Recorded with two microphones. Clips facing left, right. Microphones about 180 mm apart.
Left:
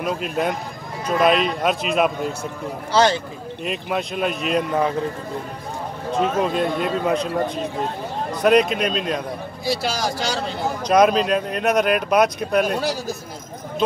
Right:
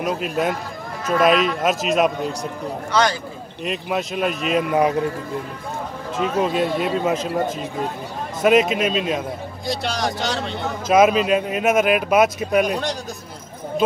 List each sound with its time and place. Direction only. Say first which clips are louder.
0.0 s speech: right 1 dB; centre (ahead or behind)
2.9 s speech: left 3 dB; 25° left (ahead or behind)
3.6 s speech: right 1 dB; centre (ahead or behind)
6.4 s speech: right 1 dB; 5° right (ahead or behind)